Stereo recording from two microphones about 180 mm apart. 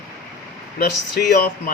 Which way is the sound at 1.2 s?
55° left (ahead or behind).